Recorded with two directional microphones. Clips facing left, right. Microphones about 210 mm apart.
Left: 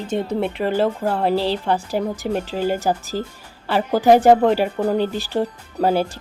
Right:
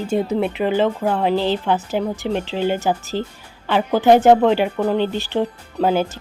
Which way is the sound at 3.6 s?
5° left (ahead or behind).